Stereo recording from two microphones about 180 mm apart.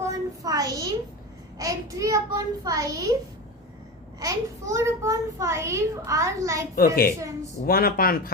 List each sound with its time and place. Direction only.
0.0 s a sound: 20° right (ahead or behind)
1.5 s a child's voice: 20° right (ahead or behind)
4.2 s a child's voice: 15° right (ahead or behind)
6.7 s a woman's voice: 55° left (ahead or behind)